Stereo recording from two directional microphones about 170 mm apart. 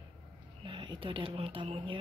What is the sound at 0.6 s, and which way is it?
Speech, 30° right (ahead or behind).